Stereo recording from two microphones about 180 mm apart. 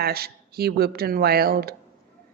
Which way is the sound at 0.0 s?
60° right (ahead or behind).